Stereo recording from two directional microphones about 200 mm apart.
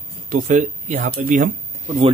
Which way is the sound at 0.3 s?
40° right (ahead or behind).